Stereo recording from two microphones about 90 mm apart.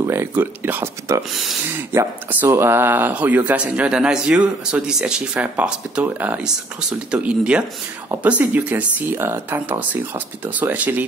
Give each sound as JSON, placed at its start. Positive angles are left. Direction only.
{"t": 0.0, "sound": "speech", "side_deg": -30}
{"t": 1.3, "sound": "speech", "side_deg": -5}
{"t": 1.7, "sound": "speech", "side_deg": -25}
{"t": 6.4, "sound": "speech", "side_deg": -10}